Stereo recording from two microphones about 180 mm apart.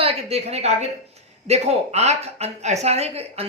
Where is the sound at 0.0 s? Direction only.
35° right (ahead or behind).